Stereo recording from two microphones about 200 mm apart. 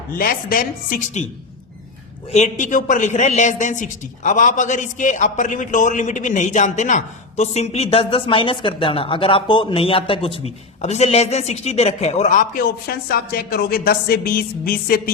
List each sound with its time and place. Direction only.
0.1 s a woman's voice: 45° left (ahead or behind)
2.3 s a man's voice: 35° left (ahead or behind)